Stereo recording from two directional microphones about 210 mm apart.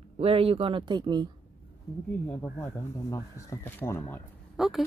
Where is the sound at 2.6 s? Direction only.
15° left (ahead or behind).